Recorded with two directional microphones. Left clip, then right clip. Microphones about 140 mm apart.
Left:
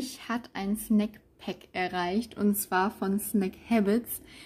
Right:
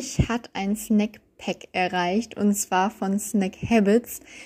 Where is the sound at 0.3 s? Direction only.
35° right (ahead or behind).